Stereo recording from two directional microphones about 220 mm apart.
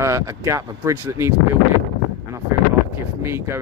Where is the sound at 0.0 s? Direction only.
15° right (ahead or behind).